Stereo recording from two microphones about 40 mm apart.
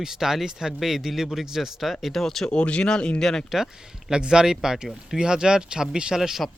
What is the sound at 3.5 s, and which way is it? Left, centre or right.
Speech, centre.